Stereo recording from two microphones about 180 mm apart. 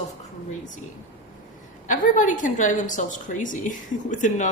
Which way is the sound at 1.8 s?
45° left (ahead or behind).